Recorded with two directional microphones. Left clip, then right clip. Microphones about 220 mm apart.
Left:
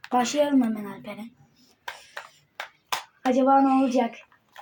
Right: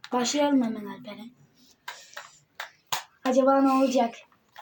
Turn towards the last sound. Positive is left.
turn(degrees=5)  # may be behind; listen again after turning